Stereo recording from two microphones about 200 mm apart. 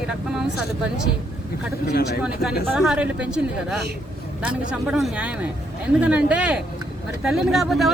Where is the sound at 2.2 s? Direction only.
5° right (ahead or behind).